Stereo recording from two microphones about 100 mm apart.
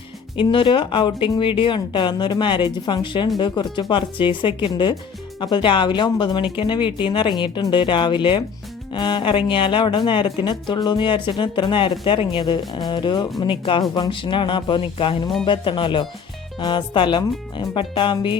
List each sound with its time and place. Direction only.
0.3 s speech: 55° left (ahead or behind)
10.5 s speech: 45° left (ahead or behind)